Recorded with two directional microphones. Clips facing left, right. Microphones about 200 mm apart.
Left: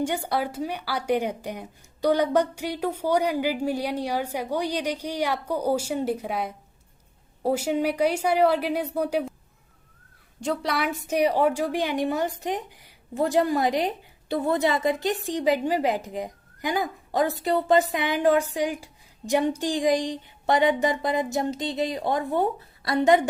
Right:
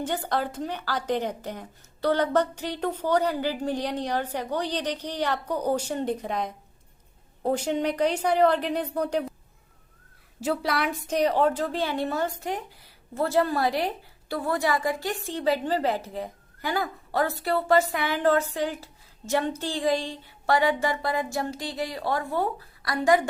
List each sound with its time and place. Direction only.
0.0 s a woman's voice: 10° left (ahead or behind)
10.4 s a woman's voice: 5° right (ahead or behind); by 23.3 s 20° left (ahead or behind)